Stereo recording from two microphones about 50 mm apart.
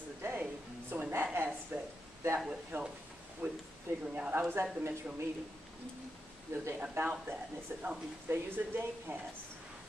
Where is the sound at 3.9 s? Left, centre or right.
Right.